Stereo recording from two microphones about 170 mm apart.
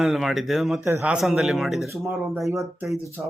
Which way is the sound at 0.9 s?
15° right (ahead or behind).